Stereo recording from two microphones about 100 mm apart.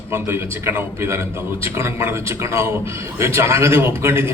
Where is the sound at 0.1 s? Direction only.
25° right (ahead or behind).